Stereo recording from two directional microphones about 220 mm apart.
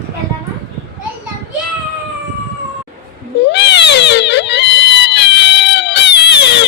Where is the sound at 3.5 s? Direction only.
50° left (ahead or behind).